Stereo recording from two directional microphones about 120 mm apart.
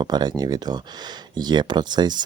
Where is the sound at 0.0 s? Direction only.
35° right (ahead or behind).